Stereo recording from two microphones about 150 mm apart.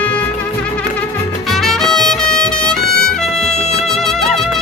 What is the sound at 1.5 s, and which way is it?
Music, centre (ahead or behind).